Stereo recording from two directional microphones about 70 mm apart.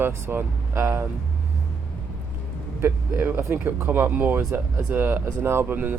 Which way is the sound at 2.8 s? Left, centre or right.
Right.